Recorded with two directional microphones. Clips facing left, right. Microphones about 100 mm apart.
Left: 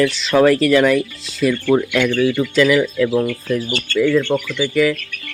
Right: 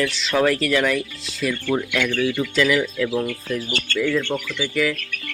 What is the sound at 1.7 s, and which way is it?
Speech, 55° left (ahead or behind).